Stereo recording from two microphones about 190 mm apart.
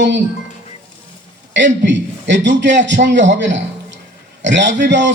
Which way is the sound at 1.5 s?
70° right (ahead or behind).